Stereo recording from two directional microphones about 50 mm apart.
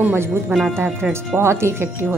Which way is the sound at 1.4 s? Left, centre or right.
Right.